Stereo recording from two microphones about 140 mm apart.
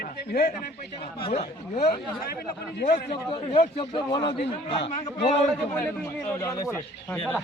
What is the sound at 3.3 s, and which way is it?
A man's voice, 40° left (ahead or behind).